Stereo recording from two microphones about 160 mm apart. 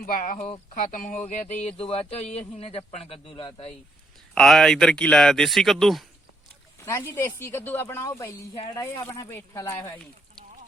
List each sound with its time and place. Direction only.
0.0 s speech: 60° left (ahead or behind); by 3.7 s 35° left (ahead or behind)
4.4 s speech: centre (ahead or behind)
6.8 s a woman's voice: 15° left (ahead or behind)